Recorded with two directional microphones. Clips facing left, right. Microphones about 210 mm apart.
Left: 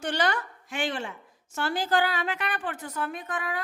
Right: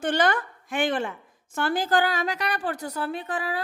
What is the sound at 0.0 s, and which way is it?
A woman's voice, 50° right (ahead or behind).